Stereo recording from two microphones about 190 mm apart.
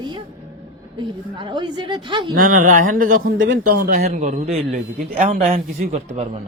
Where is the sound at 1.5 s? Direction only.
25° right (ahead or behind).